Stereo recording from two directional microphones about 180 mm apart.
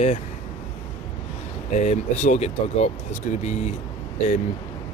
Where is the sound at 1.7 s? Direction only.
40° left (ahead or behind).